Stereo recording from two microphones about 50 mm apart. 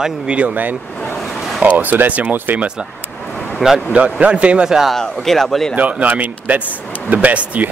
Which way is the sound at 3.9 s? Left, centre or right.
Right.